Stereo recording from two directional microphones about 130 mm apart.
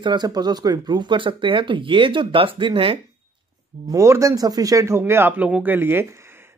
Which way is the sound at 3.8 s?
25° right (ahead or behind).